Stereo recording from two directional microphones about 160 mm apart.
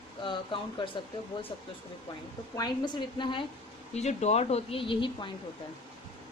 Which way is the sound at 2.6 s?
30° left (ahead or behind).